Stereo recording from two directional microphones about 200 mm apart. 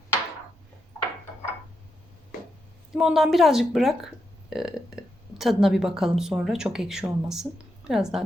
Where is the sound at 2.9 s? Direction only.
Centre (ahead or behind).